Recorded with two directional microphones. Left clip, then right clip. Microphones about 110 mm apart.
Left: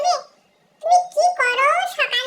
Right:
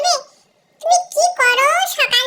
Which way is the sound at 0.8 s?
40° right (ahead or behind).